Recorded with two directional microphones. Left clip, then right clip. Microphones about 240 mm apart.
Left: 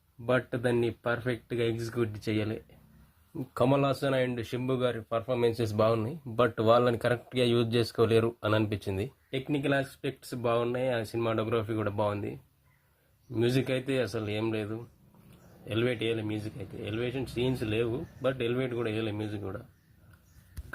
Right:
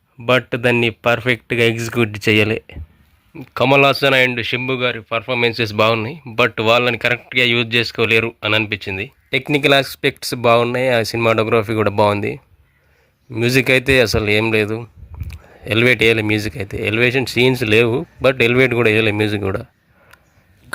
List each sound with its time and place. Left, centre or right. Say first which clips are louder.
0.3 s speech: right 13 dB; right
3.3 s speech: right 10 dB; centre
3.7 s speech: right 18 dB; right; by 9.0 s centre
9.3 s speech: right 16 dB; right